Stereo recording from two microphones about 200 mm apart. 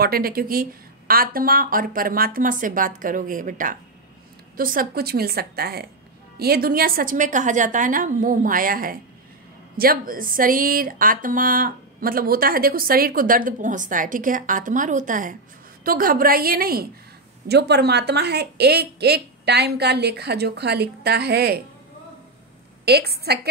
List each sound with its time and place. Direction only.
0.0 s speech: 50° right (ahead or behind)
22.8 s speech: 55° right (ahead or behind)